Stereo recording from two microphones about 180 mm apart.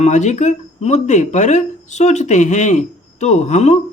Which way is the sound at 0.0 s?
40° left (ahead or behind).